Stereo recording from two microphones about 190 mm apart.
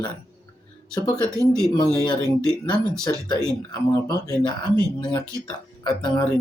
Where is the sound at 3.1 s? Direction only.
20° left (ahead or behind).